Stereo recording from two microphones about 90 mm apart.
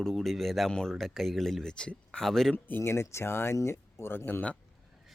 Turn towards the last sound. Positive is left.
turn(degrees=25)  # may be behind; listen again after turning